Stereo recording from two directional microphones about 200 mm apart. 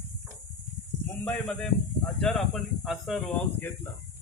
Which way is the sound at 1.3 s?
5° left (ahead or behind).